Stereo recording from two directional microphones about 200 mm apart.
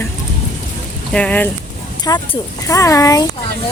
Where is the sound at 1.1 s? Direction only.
5° left (ahead or behind).